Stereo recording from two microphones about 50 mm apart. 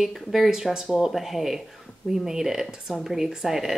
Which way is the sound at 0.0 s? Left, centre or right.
Centre.